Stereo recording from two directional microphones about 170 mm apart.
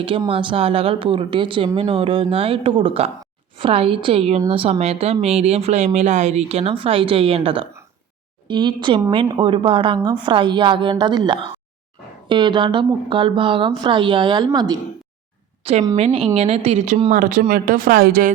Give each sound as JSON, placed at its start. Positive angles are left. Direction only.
{"t": 0.3, "sound": "a woman's voice", "side_deg": -30}
{"t": 15.6, "sound": "a woman's voice", "side_deg": -40}